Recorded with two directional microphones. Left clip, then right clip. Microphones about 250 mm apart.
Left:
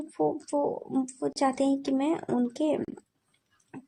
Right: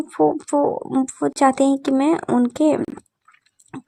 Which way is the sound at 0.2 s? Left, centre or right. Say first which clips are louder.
Right 10 dB; right.